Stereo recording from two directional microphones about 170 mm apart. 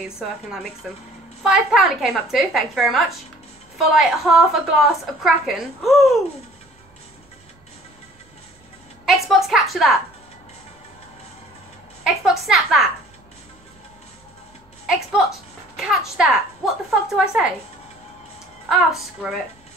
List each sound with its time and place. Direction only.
0.0 s a woman's voice: 5° right (ahead or behind)
9.0 s a woman's voice: centre (ahead or behind)
12.0 s a woman's voice: centre (ahead or behind)
15.7 s a woman's voice: centre (ahead or behind)
18.7 s a woman's voice: centre (ahead or behind)